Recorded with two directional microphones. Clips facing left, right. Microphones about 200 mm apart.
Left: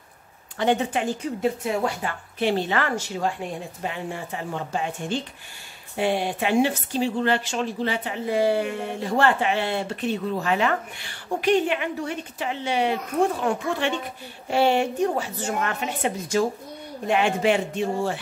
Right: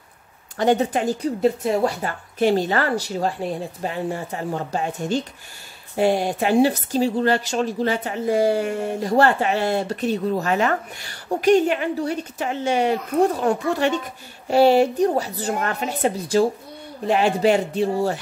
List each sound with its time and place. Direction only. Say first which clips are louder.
0.6 s speech: right 4 dB; 40° right (ahead or behind)